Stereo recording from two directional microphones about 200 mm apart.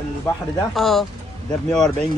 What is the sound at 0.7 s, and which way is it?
Speech, centre (ahead or behind).